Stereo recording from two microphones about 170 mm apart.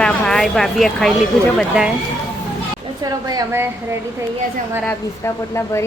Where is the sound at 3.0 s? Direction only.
20° right (ahead or behind).